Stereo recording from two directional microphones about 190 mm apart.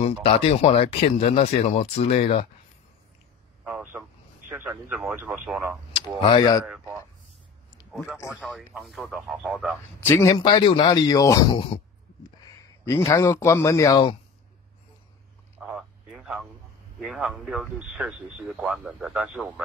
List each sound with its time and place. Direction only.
0.0 s speech: 35° left (ahead or behind)
3.6 s a sound: 10° right (ahead or behind)
4.5 s speech: 10° right (ahead or behind)
6.2 s a man's voice: 20° left (ahead or behind)
6.6 s speech: 5° right (ahead or behind)
8.4 s speech: 5° left (ahead or behind)
9.9 s a man's voice: 15° left (ahead or behind)
11.5 s a man's voice: 30° left (ahead or behind)
12.4 s speech: 15° left (ahead or behind)
15.6 s a sound: 5° right (ahead or behind)
17.0 s speech: centre (ahead or behind)